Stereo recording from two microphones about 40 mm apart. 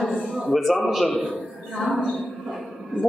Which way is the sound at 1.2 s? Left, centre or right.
Centre.